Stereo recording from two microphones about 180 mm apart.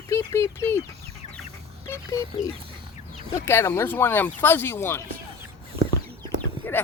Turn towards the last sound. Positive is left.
turn(degrees=10)  # may be behind; listen again after turning